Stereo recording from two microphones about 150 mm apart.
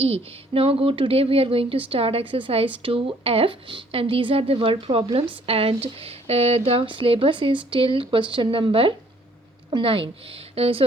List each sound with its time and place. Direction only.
0.0 s speech: 40° right (ahead or behind)